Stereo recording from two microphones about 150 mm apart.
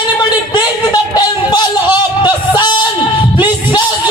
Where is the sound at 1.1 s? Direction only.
30° left (ahead or behind).